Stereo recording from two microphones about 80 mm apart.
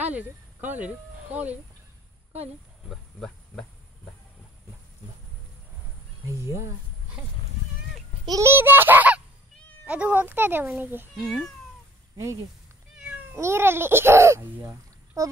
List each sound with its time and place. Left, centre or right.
0.0 s speech: centre
2.9 s speech: centre
6.2 s speech: right
8.5 s speech: right
11.2 s speech: centre
12.2 s speech: right
12.9 s cat: centre
13.4 s speech: right